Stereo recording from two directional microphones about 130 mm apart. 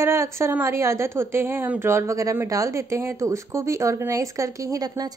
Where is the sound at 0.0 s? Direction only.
20° right (ahead or behind).